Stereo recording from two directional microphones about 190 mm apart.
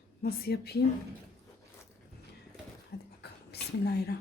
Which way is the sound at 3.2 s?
60° left (ahead or behind).